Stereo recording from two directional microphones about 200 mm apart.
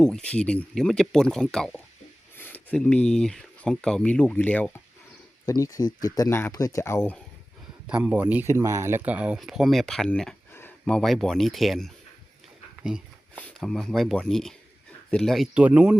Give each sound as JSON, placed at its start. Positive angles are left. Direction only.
{"t": 0.0, "sound": "speech", "side_deg": 5}
{"t": 5.5, "sound": "speech", "side_deg": 15}
{"t": 7.9, "sound": "speech", "side_deg": -5}